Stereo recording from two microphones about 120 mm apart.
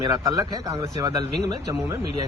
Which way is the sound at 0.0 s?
30° right (ahead or behind).